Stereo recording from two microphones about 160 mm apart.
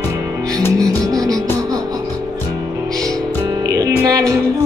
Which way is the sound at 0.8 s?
20° right (ahead or behind).